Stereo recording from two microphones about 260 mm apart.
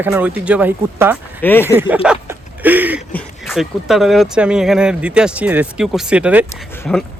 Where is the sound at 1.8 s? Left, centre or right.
Centre.